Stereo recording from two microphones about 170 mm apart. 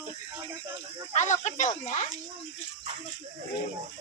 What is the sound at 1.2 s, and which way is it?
Speech, 45° left (ahead or behind).